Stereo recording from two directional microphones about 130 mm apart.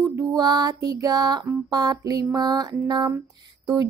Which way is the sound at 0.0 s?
25° right (ahead or behind).